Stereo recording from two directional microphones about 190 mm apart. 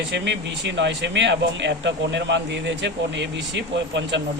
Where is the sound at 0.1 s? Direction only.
65° right (ahead or behind).